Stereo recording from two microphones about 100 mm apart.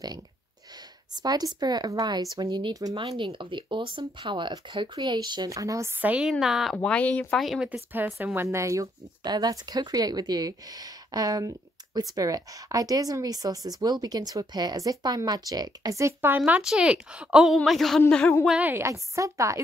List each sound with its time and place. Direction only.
1.2 s speech: 40° right (ahead or behind)
3.0 s speech: 60° right (ahead or behind)
5.5 s speech: 35° right (ahead or behind)
5.9 s a woman's voice: 15° right (ahead or behind)
6.4 s speech: centre (ahead or behind)
6.8 s speech: 10° left (ahead or behind)
7.3 s speech: centre (ahead or behind)
7.9 s speech: 20° right (ahead or behind)
9.2 s a woman's voice: 45° right (ahead or behind); by 18.0 s centre (ahead or behind)
18.6 s speech: 25° right (ahead or behind)